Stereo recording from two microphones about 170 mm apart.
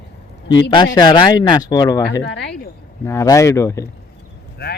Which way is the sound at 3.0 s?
20° left (ahead or behind).